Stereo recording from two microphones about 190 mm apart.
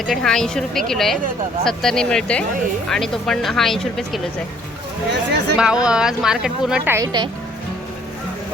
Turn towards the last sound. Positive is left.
turn(degrees=-25)  # may be behind; listen again after turning